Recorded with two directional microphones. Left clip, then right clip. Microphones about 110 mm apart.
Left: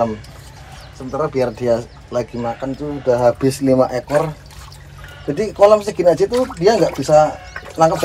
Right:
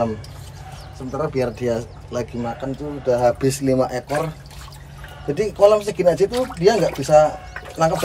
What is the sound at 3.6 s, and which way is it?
Speech, 20° left (ahead or behind).